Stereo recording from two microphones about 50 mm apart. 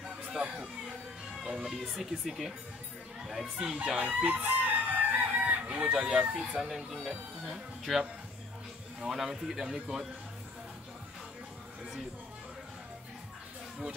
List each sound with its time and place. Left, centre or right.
1.3 s music: centre
2.0 s speech: centre
4.0 s chicken: right
6.3 s speech: centre